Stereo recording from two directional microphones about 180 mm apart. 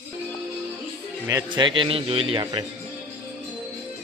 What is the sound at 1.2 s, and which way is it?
A man's voice, 20° right (ahead or behind).